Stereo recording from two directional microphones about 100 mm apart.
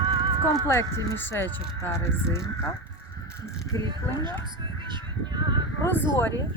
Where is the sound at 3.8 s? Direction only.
50° right (ahead or behind).